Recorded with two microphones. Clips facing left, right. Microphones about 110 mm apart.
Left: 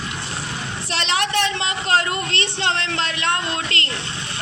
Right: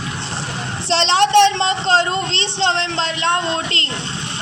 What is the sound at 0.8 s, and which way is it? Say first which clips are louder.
A man's voice: right 8 dB; 30° right (ahead or behind).